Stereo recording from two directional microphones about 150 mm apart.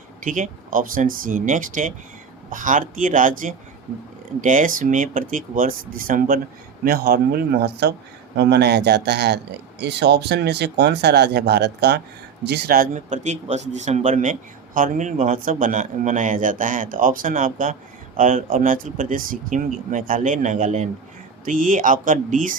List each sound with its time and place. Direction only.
0.3 s speech: 60° right (ahead or behind)
6.8 s speech: 90° right; by 20.9 s 50° right (ahead or behind)
21.4 s speech: 65° right (ahead or behind)